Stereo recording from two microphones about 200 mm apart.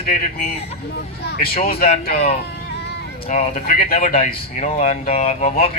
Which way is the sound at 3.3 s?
35° left (ahead or behind).